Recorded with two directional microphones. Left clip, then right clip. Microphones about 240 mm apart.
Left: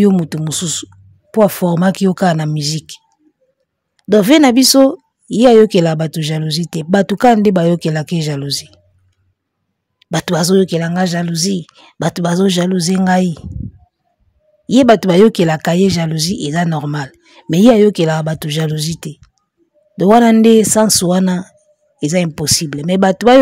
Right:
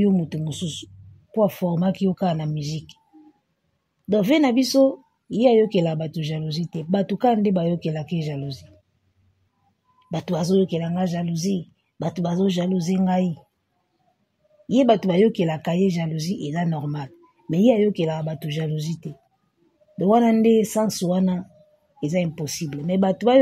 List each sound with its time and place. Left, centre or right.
0.0 s speech: left
4.1 s speech: left
9.9 s speech: left
14.7 s speech: left